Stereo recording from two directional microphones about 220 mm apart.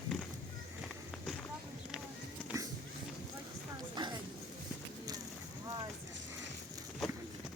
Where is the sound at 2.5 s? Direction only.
15° right (ahead or behind).